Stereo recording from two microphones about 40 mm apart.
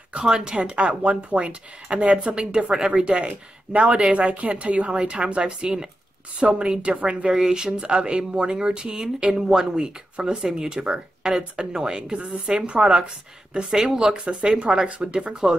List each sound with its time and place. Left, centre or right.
0.2 s speech: right
7.3 s speech: centre
13.7 s speech: centre
13.9 s speech: right